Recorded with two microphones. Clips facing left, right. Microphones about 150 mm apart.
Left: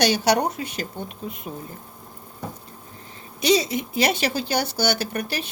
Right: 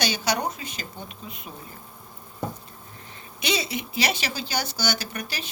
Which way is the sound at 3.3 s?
40° left (ahead or behind).